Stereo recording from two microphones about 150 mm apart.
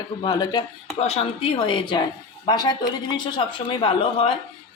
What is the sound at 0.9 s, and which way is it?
Speech, 40° left (ahead or behind).